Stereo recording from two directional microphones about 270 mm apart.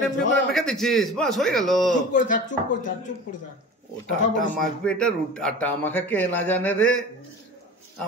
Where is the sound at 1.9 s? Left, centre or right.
Left.